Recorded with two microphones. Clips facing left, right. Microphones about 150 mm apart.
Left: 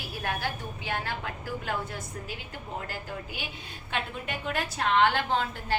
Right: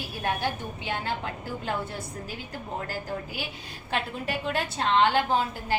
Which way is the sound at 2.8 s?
40° right (ahead or behind).